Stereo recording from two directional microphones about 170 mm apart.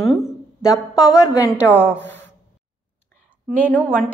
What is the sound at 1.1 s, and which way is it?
Speech, 20° left (ahead or behind).